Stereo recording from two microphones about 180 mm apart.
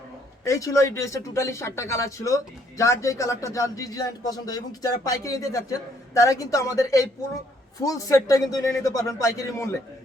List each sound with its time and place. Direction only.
0.4 s speech: 20° left (ahead or behind)